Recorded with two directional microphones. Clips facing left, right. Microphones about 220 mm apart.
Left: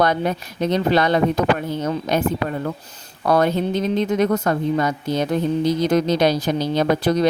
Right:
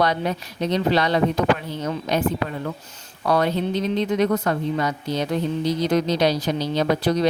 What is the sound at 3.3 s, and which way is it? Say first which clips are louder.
Speech: left 3 dB; 50° left (ahead or behind).